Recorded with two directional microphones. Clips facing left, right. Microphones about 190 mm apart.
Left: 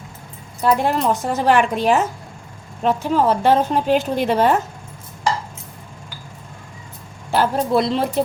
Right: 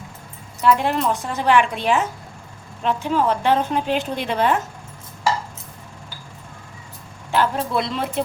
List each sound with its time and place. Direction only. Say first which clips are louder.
0.6 s a woman's voice: left 1 dB; 40° left (ahead or behind)
7.3 s a woman's voice: left 3 dB; 40° left (ahead or behind)